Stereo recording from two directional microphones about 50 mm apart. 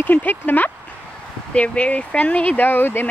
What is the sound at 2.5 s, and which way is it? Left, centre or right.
Speech, left.